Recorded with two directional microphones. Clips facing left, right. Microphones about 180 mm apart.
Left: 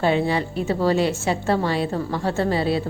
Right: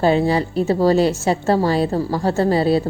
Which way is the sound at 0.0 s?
40° right (ahead or behind).